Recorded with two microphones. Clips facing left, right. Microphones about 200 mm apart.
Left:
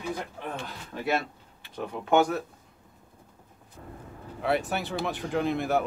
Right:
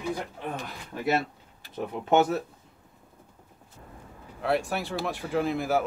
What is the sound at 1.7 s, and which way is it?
Speech, 25° right (ahead or behind).